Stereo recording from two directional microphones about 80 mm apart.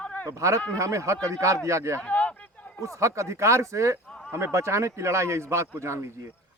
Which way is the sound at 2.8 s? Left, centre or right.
Right.